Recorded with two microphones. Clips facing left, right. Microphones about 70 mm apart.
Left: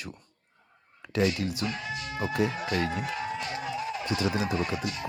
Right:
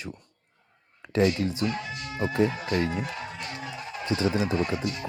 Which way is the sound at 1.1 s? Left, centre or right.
Right.